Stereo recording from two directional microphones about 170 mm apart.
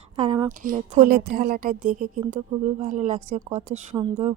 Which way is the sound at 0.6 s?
55° right (ahead or behind).